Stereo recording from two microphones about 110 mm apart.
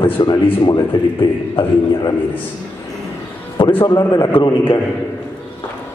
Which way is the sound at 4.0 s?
35° left (ahead or behind).